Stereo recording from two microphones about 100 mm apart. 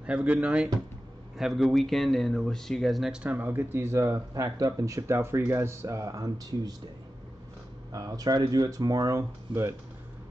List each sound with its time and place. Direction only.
0.0 s speech: 10° right (ahead or behind)
1.4 s speech: centre (ahead or behind); by 6.7 s 40° right (ahead or behind)
7.9 s speech: 35° right (ahead or behind)
9.5 s speech: 25° right (ahead or behind)